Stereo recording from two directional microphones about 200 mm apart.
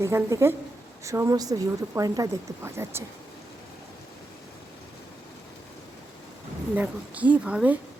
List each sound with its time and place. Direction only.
0.0 s speech: 15° right (ahead or behind)
6.7 s speech: 5° right (ahead or behind)